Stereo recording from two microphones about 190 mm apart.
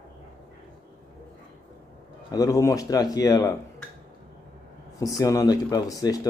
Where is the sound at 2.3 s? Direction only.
20° left (ahead or behind).